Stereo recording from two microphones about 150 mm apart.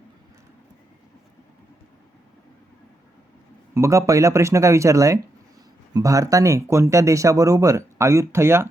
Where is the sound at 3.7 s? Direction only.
20° right (ahead or behind).